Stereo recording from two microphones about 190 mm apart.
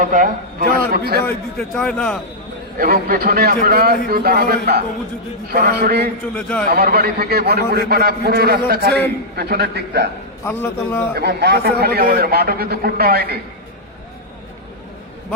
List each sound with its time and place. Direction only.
0.0 s a man's voice: 45° right (ahead or behind)
1.7 s a man's voice: 5° left (ahead or behind)
2.7 s a man's voice: 50° right (ahead or behind)
6.3 s a man's voice: 5° left (ahead or behind)
6.7 s a man's voice: 50° right (ahead or behind)
10.4 s a man's voice: 10° left (ahead or behind)
11.1 s a man's voice: 55° right (ahead or behind)